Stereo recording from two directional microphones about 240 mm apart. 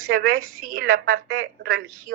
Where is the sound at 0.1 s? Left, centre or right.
Right.